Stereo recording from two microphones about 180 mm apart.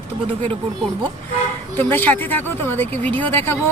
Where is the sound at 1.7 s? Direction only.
10° left (ahead or behind).